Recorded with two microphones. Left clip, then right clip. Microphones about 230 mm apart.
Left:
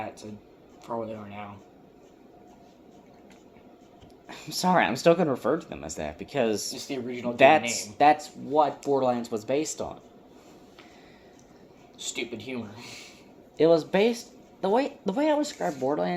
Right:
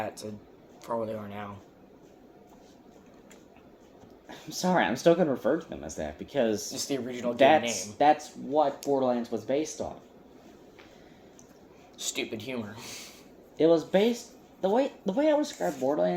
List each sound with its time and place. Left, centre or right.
0.9 s speech: right
4.3 s speech: left
6.7 s speech: right
7.3 s speech: left
12.1 s speech: right
13.6 s speech: left